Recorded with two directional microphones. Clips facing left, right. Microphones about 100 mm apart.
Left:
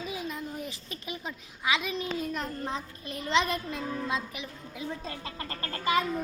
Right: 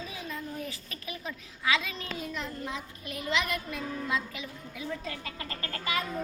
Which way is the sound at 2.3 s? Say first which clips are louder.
Left 3 dB; 40° left (ahead or behind).